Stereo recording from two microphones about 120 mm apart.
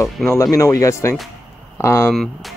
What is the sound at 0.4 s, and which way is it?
Speech, 25° left (ahead or behind).